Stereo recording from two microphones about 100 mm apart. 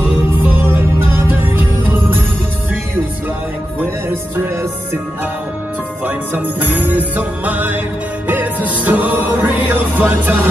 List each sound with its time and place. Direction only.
0.0 s music: 20° right (ahead or behind)
6.0 s jingle bell: 20° right (ahead or behind)
8.3 s music: 15° right (ahead or behind)